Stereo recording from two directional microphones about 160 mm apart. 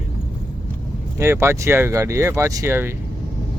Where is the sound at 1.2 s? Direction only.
15° right (ahead or behind).